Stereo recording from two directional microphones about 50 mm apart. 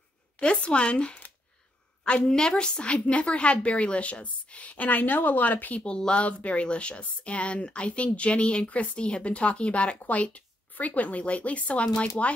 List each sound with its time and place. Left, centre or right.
0.4 s a woman's voice: left